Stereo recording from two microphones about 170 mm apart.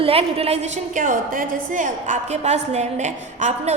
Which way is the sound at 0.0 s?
35° right (ahead or behind).